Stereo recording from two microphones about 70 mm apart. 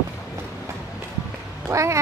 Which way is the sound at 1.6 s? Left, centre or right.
Right.